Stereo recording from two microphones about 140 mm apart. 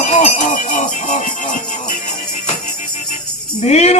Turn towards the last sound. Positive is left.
turn(degrees=50)  # may be behind; listen again after turning